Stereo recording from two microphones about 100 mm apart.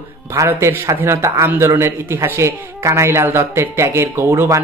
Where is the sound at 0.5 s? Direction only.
25° right (ahead or behind).